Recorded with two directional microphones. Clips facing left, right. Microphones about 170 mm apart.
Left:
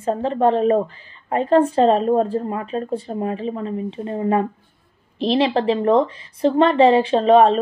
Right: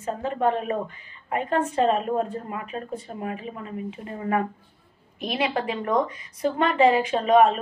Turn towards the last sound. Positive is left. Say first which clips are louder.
# left 5 dB
turn(degrees=30)  # may be behind; listen again after turning